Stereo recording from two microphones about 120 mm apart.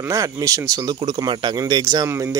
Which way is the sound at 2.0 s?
20° right (ahead or behind).